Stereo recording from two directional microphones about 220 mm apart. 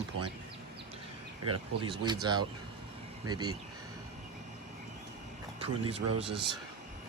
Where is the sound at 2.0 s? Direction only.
20° right (ahead or behind).